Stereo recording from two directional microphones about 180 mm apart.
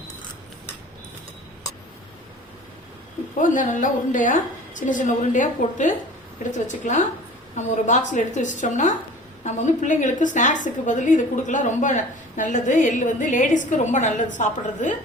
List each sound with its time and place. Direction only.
3.4 s a woman's voice: 45° left (ahead or behind)